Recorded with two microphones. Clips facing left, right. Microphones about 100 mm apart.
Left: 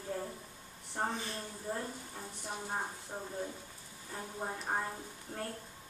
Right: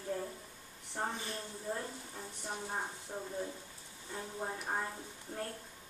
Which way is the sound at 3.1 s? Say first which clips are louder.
Right 1 dB; 20° left (ahead or behind).